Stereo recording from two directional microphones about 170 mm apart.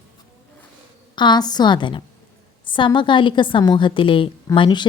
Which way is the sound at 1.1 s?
25° left (ahead or behind).